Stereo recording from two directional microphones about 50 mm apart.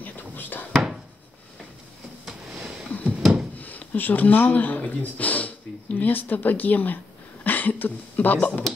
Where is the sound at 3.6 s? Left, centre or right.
Left.